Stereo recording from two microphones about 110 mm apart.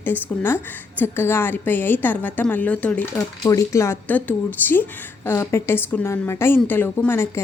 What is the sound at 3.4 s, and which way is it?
A woman's voice, 30° left (ahead or behind).